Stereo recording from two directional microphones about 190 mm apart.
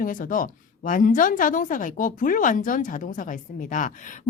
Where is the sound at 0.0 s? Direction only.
45° left (ahead or behind).